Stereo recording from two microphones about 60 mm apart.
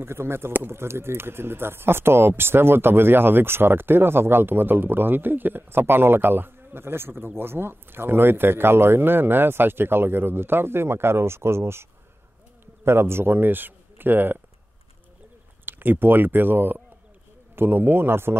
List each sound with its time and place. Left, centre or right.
0.0 s speech: right
15.6 s speech: right